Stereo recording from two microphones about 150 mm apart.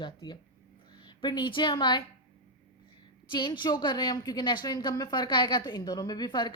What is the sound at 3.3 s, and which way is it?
A woman's voice, 30° left (ahead or behind).